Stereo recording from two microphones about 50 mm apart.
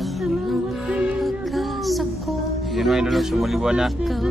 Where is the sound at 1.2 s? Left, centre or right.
Centre.